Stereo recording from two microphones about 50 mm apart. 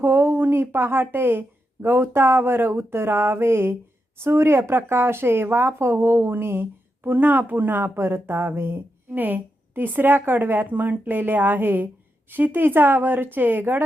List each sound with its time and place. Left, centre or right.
0.0 s speech: right